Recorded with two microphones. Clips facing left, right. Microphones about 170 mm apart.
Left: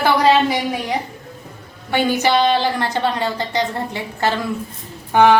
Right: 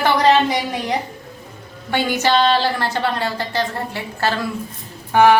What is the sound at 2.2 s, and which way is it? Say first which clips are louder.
A woman's voice: right 2 dB; 15° left (ahead or behind).